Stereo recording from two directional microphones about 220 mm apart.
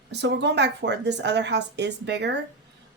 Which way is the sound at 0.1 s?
50° right (ahead or behind).